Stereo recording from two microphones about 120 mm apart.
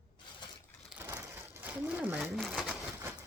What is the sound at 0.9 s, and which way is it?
Crushing, 20° right (ahead or behind).